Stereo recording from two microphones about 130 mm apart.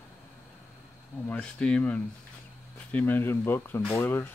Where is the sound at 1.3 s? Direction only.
10° left (ahead or behind).